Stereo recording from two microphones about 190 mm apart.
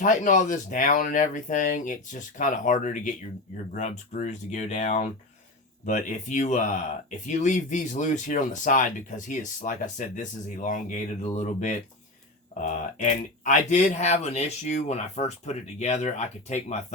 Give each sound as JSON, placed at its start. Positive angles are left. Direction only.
{"t": 0.0, "sound": "speech", "side_deg": 40}